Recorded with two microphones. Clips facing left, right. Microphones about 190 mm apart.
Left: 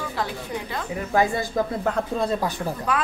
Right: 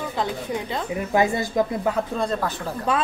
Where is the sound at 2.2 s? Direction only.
10° left (ahead or behind).